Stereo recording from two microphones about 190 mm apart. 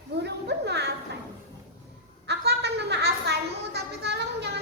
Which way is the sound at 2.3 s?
60° right (ahead or behind).